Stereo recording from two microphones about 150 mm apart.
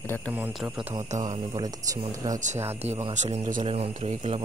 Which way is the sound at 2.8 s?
45° right (ahead or behind).